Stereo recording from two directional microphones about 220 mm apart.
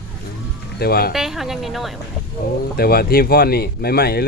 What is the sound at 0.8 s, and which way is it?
Speech, 45° left (ahead or behind).